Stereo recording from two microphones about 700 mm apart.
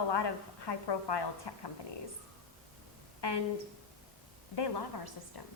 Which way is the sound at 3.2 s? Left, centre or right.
Left.